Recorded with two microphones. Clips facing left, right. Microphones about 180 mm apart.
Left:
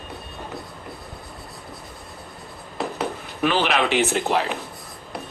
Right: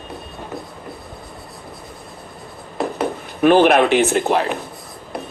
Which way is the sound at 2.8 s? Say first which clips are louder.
Right 5 dB; 50° right (ahead or behind).